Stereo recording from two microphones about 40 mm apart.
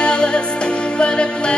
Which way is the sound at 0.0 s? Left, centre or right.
Left.